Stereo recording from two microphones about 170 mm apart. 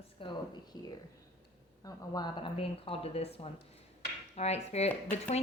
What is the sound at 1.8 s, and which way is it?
A woman's voice, 25° left (ahead or behind).